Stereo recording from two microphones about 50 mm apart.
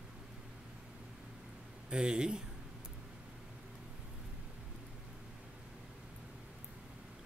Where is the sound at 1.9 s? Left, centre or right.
Centre.